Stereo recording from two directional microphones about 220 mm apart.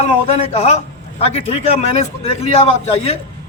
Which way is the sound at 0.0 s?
30° left (ahead or behind).